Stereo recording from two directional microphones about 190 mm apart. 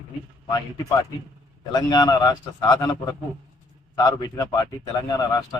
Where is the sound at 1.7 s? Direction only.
20° left (ahead or behind).